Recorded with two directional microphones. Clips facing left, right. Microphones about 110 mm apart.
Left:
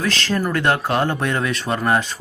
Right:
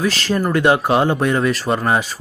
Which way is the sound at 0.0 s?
10° right (ahead or behind).